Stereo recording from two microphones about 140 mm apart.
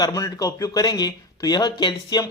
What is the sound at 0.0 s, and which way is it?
Speech, 25° left (ahead or behind).